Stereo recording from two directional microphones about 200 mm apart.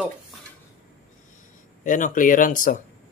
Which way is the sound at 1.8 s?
40° left (ahead or behind).